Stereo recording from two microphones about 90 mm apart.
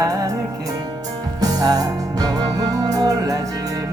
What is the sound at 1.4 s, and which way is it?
Music, 45° right (ahead or behind).